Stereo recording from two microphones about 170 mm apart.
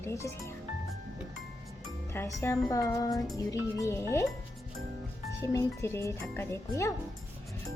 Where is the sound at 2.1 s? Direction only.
15° left (ahead or behind).